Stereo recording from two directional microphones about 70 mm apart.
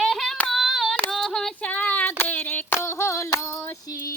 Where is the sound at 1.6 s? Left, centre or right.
Left.